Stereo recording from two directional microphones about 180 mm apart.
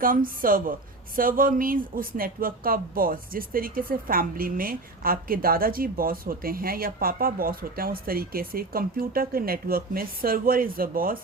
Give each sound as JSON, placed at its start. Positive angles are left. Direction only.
{"t": 0.0, "sound": "speech", "side_deg": -50}